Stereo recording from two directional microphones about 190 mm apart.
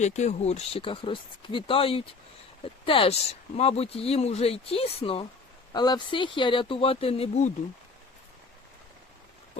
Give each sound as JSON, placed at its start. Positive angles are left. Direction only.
{"t": 0.0, "sound": "speech", "side_deg": 35}